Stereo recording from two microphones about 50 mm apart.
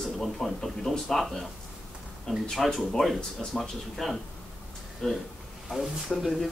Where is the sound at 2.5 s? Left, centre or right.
Centre.